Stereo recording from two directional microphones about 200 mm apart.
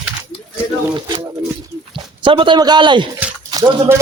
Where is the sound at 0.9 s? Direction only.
25° right (ahead or behind).